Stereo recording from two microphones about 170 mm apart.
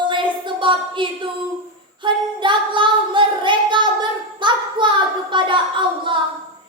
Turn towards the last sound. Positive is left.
turn(degrees=-30)  # may be behind; listen again after turning